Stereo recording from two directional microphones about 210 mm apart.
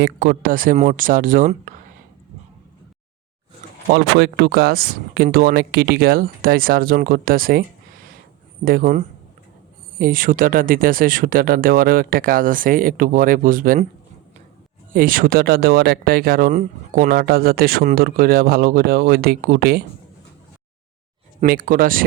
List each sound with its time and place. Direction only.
0.0 s speech: 40° right (ahead or behind)
3.9 s speech: 50° right (ahead or behind)
8.6 s speech: 45° right (ahead or behind)
14.9 s speech: 40° right (ahead or behind)
21.4 s speech: 45° right (ahead or behind)